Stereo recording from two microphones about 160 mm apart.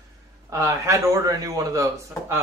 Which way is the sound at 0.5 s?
20° right (ahead or behind).